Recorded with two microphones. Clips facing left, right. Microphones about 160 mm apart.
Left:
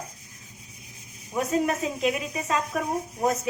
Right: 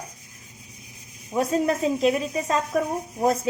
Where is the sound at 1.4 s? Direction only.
35° right (ahead or behind).